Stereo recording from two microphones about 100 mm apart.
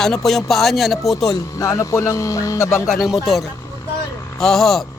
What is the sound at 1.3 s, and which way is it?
Speech, 35° left (ahead or behind).